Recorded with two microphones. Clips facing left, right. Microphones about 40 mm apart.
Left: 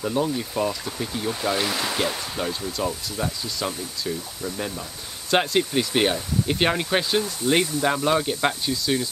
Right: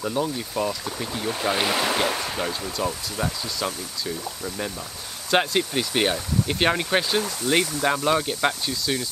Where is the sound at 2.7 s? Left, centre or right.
Centre.